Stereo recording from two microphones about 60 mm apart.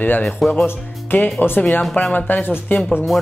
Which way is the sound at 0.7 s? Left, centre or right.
Left.